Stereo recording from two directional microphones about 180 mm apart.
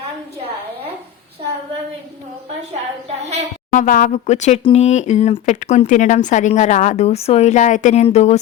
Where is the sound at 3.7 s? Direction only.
50° left (ahead or behind).